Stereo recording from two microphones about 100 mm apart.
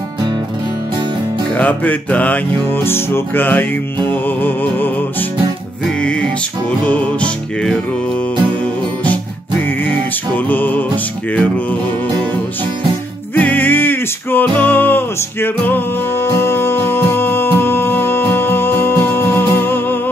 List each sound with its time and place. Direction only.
1.6 s music: 15° left (ahead or behind)
9.8 s music: 15° left (ahead or behind)
13.3 s music: 20° left (ahead or behind)